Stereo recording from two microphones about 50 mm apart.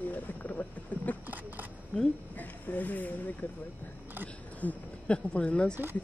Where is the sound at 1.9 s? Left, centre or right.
Left.